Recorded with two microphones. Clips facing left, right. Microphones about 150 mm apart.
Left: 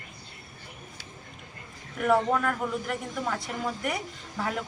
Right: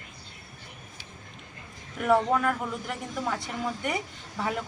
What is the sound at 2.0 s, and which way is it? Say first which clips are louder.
Speech: right 1 dB; centre (ahead or behind).